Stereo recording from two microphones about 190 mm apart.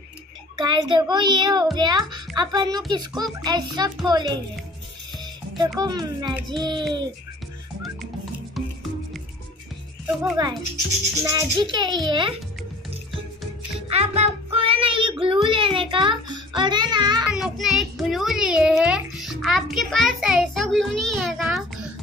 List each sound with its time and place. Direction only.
0.6 s a child's voice: 25° right (ahead or behind)
5.8 s a child's voice: 20° right (ahead or behind)
8.6 s music: centre (ahead or behind)
10.0 s speech: 5° right (ahead or behind)
11.2 s a child's voice: 20° right (ahead or behind)
13.7 s music: 30° right (ahead or behind)
15.4 s a child's voice: 25° right (ahead or behind)
17.2 s a child's voice: 5° right (ahead or behind)